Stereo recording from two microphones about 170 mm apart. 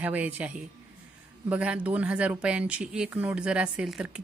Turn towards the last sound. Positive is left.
turn(degrees=-5)  # may be behind; listen again after turning